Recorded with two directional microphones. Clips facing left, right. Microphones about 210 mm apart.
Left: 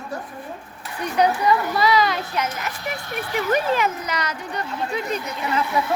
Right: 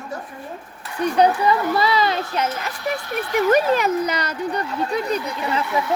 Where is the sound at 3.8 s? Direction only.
35° right (ahead or behind).